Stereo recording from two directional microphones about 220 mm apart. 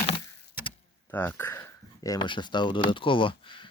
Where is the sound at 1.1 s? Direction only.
10° left (ahead or behind).